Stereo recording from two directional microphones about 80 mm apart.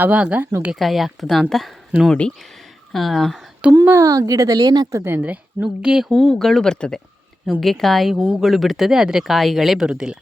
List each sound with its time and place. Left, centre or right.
0.0 s speech: centre
0.8 s speech: centre
3.6 s speech: centre
4.0 s speech: right
5.0 s speech: right
5.6 s speech: centre